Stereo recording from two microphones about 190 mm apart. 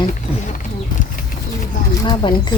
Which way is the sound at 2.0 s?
20° left (ahead or behind).